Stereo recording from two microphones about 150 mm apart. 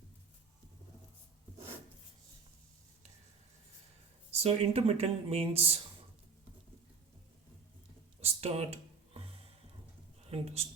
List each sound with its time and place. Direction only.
4.3 s speech: 45° right (ahead or behind)
8.2 s a sound: 40° right (ahead or behind)
10.2 s speech: 40° right (ahead or behind)